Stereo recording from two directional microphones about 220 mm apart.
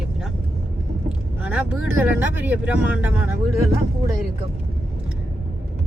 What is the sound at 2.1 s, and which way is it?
Speech, 10° right (ahead or behind).